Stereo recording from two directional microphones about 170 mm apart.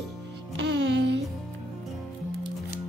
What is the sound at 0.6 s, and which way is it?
Music, 90° right.